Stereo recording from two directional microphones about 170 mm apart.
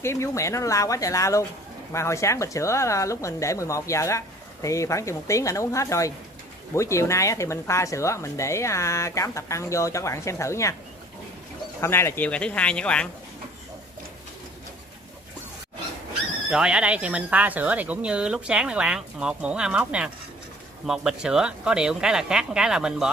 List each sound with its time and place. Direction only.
0.0 s a woman's voice: 15° left (ahead or behind)
11.8 s a woman's voice: 15° left (ahead or behind)
16.4 s speech: 5° right (ahead or behind)